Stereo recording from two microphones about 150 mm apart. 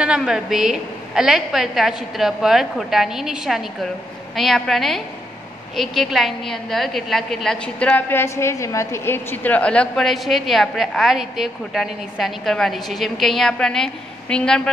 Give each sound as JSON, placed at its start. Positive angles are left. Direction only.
{"t": 0.0, "sound": "a woman's voice", "side_deg": -5}